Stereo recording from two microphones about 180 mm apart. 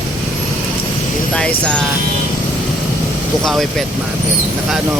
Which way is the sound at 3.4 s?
Centre (ahead or behind).